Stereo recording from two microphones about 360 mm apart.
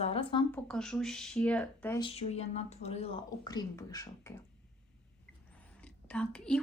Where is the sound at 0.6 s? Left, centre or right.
Centre.